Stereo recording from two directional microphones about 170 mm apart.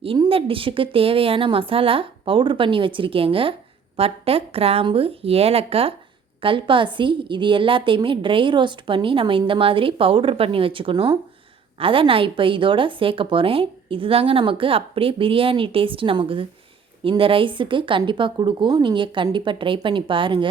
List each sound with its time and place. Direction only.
0.0 s a woman's voice: 30° right (ahead or behind)